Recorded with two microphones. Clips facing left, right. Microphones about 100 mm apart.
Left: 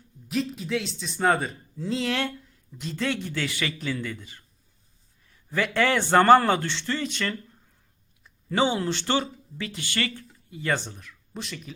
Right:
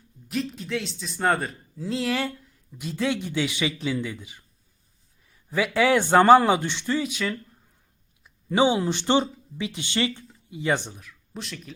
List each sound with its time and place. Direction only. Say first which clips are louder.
0.3 s speech: left 1 dB; centre (ahead or behind)
5.5 s speech: right 3 dB; 10° right (ahead or behind)
11.0 s speech: even; centre (ahead or behind)